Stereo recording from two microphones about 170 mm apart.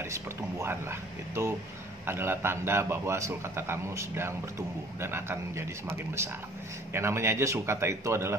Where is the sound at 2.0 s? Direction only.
15° right (ahead or behind).